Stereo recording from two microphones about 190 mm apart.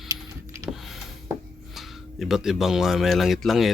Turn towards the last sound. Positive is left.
turn(degrees=0)  # may be behind; listen again after turning